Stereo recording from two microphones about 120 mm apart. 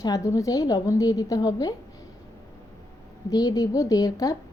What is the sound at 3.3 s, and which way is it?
A woman's voice, 30° left (ahead or behind).